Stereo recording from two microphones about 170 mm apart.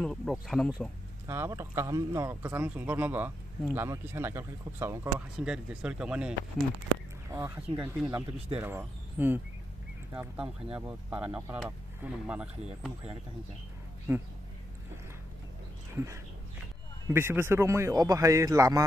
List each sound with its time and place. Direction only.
0.0 s speech: centre (ahead or behind)
1.2 s speech: 15° right (ahead or behind)
7.2 s speech: 15° right (ahead or behind)
15.9 s dog: 15° right (ahead or behind)
17.1 s speech: 15° right (ahead or behind)